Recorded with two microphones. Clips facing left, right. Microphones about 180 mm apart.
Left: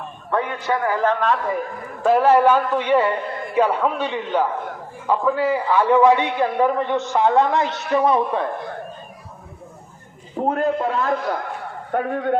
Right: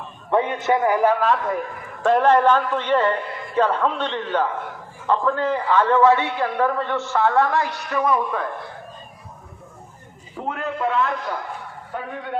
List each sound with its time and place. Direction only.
0.3 s a man's voice: 20° right (ahead or behind); by 8.4 s 30° left (ahead or behind)
10.3 s a man's voice: 40° left (ahead or behind)
11.9 s a man's voice: 50° left (ahead or behind)